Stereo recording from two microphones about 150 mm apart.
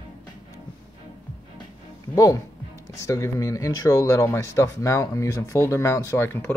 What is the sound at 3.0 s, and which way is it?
Speech, 20° left (ahead or behind).